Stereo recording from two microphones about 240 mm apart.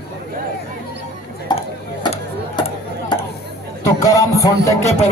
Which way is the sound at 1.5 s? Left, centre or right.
Centre.